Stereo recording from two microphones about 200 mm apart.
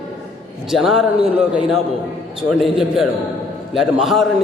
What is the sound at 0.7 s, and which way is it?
Speech, centre (ahead or behind).